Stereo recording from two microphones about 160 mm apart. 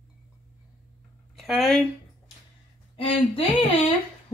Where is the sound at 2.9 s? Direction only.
35° left (ahead or behind).